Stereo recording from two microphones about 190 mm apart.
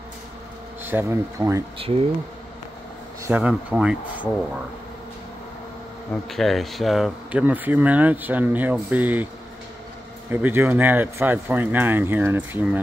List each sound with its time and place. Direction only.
0.8 s speech: 10° right (ahead or behind)
1.8 s speech: 30° right (ahead or behind)
3.3 s speech: 5° right (ahead or behind)
6.3 s speech: centre (ahead or behind)
10.3 s speech: 10° right (ahead or behind)